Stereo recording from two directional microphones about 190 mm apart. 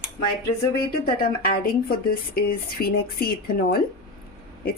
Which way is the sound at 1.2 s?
50° left (ahead or behind).